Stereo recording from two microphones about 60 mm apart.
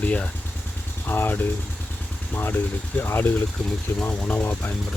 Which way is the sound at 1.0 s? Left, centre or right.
Left.